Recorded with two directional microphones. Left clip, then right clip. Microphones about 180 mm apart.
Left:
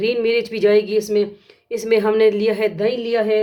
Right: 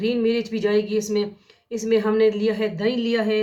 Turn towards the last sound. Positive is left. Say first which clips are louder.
# left 4 dB
turn(degrees=40)  # may be behind; listen again after turning